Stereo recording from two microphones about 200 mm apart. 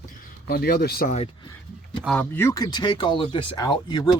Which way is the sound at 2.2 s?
10° left (ahead or behind).